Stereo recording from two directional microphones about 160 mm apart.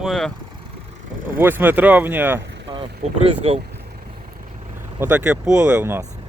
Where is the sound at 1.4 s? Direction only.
15° right (ahead or behind).